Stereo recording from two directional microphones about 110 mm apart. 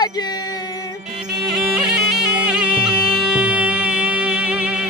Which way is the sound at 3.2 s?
10° right (ahead or behind).